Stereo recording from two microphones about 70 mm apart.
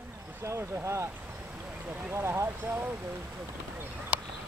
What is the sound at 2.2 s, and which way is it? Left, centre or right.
Speech, right.